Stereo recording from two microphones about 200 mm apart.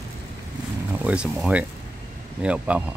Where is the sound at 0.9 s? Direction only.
5° right (ahead or behind).